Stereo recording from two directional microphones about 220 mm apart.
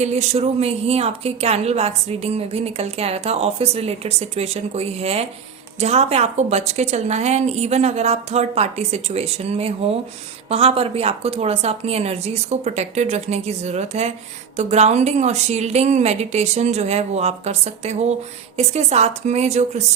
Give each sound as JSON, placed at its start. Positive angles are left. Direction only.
{"t": 0.0, "sound": "a woman's voice", "side_deg": -30}